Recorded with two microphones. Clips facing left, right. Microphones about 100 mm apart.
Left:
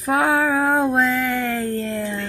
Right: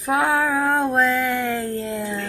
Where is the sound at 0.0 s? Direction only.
Centre (ahead or behind).